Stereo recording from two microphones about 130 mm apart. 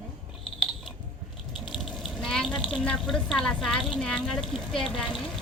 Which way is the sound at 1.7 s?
Centre (ahead or behind).